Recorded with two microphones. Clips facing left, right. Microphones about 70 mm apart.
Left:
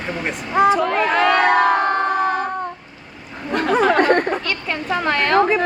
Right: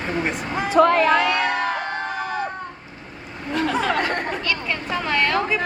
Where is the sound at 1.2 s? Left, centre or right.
Left.